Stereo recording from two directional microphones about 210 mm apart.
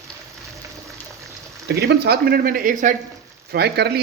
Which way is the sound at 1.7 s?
50° right (ahead or behind).